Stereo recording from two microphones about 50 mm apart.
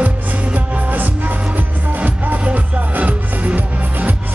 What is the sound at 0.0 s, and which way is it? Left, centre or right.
Music, right.